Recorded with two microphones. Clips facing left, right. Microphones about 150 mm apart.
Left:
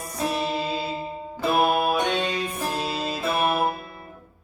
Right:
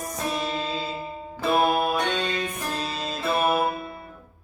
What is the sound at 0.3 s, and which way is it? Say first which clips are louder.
Music: left 2 dB; 10° left (ahead or behind).